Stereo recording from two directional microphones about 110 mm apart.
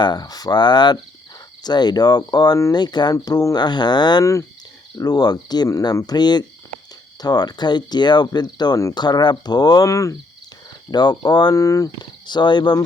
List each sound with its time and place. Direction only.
0.0 s speech: 40° left (ahead or behind)
12.2 s speech: 45° left (ahead or behind)